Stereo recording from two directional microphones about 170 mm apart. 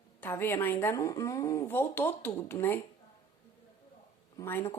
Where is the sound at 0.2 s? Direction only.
10° left (ahead or behind).